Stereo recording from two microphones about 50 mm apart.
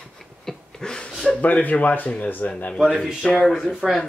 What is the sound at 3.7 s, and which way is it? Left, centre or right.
Speech, centre.